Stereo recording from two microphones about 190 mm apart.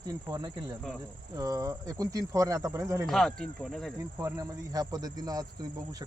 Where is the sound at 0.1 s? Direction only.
20° right (ahead or behind).